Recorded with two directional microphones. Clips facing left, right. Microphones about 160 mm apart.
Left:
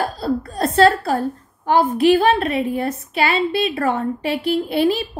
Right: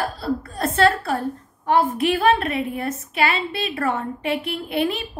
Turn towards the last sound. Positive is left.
turn(degrees=35)  # may be behind; listen again after turning